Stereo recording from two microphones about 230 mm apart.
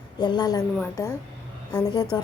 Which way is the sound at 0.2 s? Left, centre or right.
Centre.